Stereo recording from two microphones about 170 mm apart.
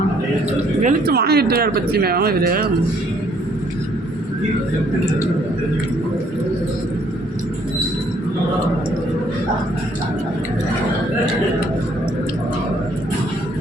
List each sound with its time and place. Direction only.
0.8 s speech: 50° right (ahead or behind)
1.1 s speech: 70° right (ahead or behind)